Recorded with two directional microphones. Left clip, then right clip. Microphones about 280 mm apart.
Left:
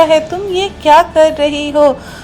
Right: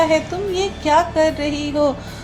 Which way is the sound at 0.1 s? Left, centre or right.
Left.